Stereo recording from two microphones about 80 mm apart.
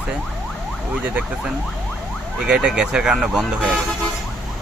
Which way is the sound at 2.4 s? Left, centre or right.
Centre.